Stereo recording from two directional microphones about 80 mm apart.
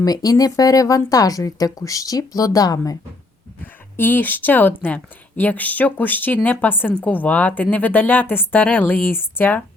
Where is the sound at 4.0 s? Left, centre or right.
Left.